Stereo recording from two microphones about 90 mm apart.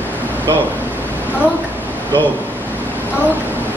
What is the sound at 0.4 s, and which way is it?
Air conditioning, 20° right (ahead or behind).